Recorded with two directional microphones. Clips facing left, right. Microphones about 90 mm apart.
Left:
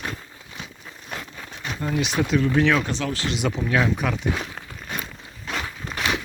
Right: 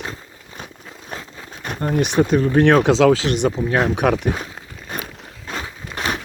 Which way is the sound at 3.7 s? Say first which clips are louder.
Even; 45° right (ahead or behind).